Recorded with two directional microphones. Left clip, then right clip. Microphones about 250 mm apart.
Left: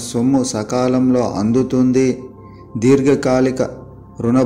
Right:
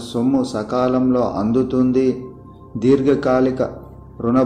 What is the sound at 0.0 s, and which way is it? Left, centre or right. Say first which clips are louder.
Speech: left 2 dB; left.